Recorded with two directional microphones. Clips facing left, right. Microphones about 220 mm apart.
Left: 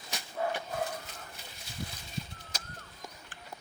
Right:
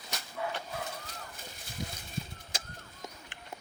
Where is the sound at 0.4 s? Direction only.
45° left (ahead or behind).